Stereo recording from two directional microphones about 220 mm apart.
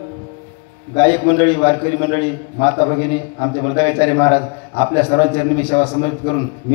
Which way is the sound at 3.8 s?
25° left (ahead or behind).